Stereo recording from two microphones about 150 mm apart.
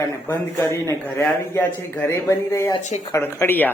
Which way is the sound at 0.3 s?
15° left (ahead or behind).